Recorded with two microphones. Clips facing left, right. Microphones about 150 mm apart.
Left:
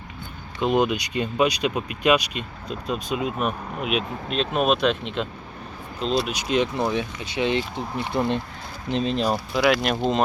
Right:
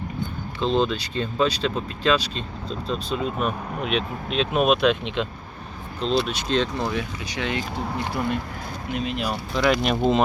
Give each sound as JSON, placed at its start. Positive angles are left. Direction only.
{"t": 0.6, "sound": "speech", "side_deg": 15}
{"t": 9.6, "sound": "speech", "side_deg": 5}